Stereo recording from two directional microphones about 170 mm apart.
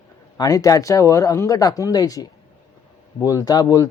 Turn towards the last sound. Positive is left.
turn(degrees=20)  # may be behind; listen again after turning